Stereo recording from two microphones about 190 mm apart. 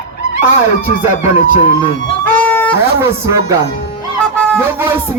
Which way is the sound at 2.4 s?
10° left (ahead or behind).